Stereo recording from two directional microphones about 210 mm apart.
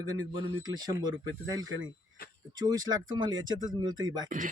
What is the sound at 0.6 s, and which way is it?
Speech, 20° right (ahead or behind).